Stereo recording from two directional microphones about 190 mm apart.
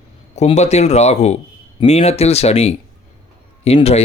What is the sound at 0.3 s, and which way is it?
Speech, 35° left (ahead or behind).